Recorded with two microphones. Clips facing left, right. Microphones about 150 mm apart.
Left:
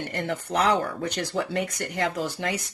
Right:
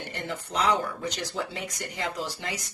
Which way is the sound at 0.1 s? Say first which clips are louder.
Left 5 dB; 60° left (ahead or behind).